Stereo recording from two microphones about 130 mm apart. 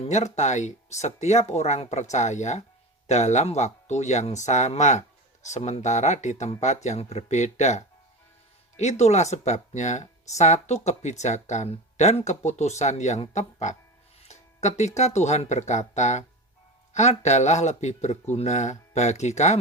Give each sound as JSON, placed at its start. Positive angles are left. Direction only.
{"t": 0.0, "sound": "speech", "side_deg": 65}